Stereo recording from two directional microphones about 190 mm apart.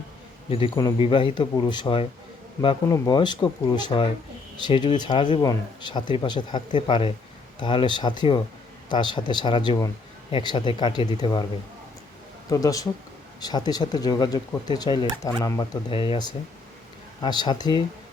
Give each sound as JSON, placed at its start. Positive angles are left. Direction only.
{"t": 0.5, "sound": "speech", "side_deg": 25}
{"t": 12.5, "sound": "speech", "side_deg": 20}